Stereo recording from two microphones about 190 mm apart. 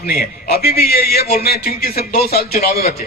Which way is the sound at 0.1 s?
55° left (ahead or behind).